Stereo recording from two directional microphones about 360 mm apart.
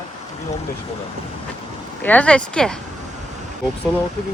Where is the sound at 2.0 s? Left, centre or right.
Centre.